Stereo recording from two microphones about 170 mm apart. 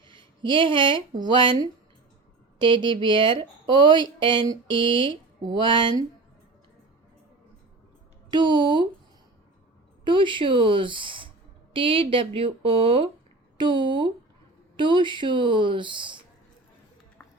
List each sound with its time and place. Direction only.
0.1 s a woman's voice: 30° right (ahead or behind)
8.3 s speech: 25° right (ahead or behind)
10.0 s speech: 30° right (ahead or behind)